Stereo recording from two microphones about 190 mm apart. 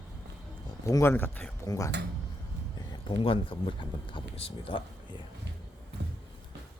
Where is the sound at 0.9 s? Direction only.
15° left (ahead or behind); by 4.8 s 30° left (ahead or behind).